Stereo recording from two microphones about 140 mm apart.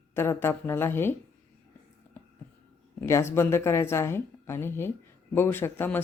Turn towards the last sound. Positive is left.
turn(degrees=15)  # may be behind; listen again after turning